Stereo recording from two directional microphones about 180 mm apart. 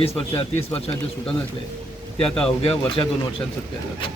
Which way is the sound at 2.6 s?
30° left (ahead or behind).